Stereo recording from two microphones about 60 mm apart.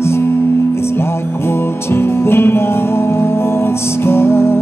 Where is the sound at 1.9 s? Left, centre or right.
Left.